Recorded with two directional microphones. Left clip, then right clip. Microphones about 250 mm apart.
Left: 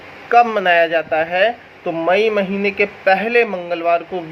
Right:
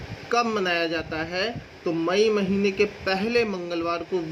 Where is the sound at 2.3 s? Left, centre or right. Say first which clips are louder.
Left 6 dB; centre.